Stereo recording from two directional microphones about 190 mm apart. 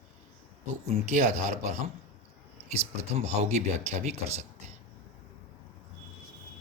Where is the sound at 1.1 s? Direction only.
40° right (ahead or behind).